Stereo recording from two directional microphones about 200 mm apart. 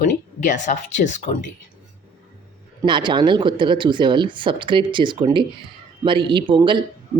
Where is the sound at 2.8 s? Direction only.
25° right (ahead or behind).